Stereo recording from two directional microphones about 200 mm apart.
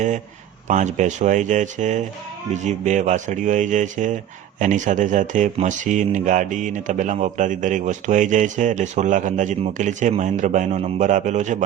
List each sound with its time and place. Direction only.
0.7 s speech: 35° right (ahead or behind)